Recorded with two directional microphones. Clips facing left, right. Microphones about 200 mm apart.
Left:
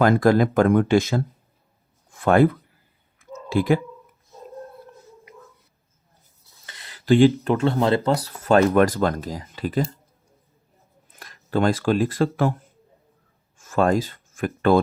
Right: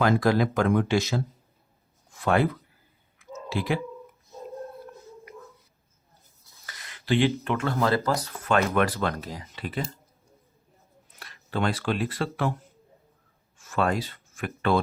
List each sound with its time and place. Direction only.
0.0 s speech: 50° left (ahead or behind)
3.2 s a sound: 50° left (ahead or behind)
6.7 s a sound: 30° left (ahead or behind)
7.0 s speech: 45° left (ahead or behind)
11.2 s speech: 45° left (ahead or behind)
13.6 s speech: 45° left (ahead or behind)